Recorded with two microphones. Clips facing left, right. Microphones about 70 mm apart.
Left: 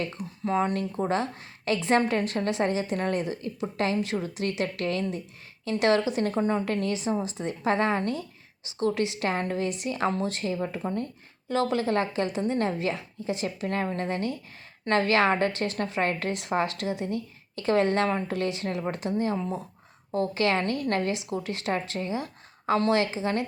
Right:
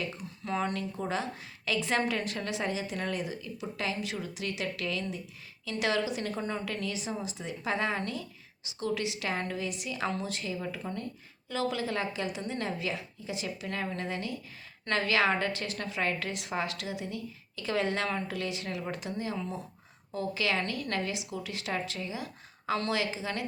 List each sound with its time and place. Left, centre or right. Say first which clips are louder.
0.4 s speech: left 6 dB; left
1.0 s a woman's voice: left 6 dB; left